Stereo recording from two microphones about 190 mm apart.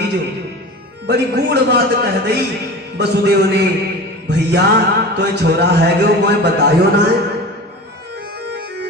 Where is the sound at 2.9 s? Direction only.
60° right (ahead or behind).